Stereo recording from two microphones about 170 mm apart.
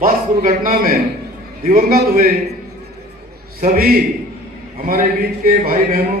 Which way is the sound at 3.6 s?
55° right (ahead or behind).